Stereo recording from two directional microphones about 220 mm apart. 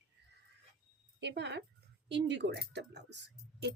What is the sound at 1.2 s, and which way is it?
Speech, 50° right (ahead or behind).